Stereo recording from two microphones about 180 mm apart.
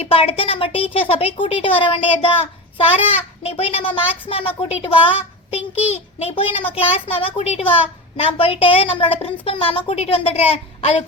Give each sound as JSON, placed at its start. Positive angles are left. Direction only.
{"t": 0.0, "sound": "a woman's voice", "side_deg": 30}
{"t": 5.5, "sound": "a child's voice", "side_deg": -10}
{"t": 6.2, "sound": "a child's voice", "side_deg": 30}